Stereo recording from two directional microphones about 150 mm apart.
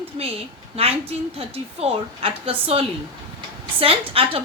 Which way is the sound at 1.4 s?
40° right (ahead or behind).